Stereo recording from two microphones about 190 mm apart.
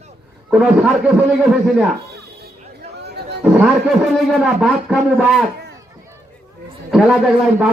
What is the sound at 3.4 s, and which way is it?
A man's voice, 5° right (ahead or behind).